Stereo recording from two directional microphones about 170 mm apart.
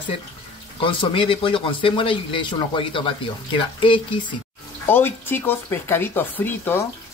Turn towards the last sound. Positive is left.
turn(degrees=10)  # may be behind; listen again after turning